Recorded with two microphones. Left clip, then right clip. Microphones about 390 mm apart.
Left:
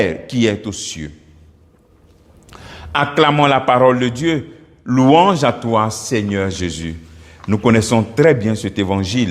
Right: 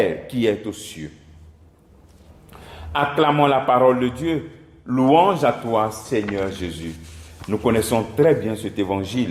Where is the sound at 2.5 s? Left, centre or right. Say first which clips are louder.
Left 6 dB; left.